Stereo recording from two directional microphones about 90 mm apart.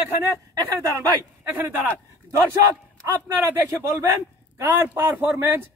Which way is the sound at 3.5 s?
30° right (ahead or behind).